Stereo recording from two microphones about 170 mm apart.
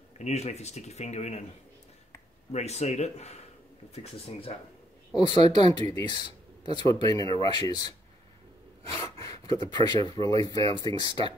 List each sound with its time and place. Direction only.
0.2 s speech: 40° left (ahead or behind)
2.5 s speech: 40° left (ahead or behind); by 7.9 s 25° left (ahead or behind)
9.2 s a sound: 20° left (ahead or behind)
10.0 s speech: 25° left (ahead or behind)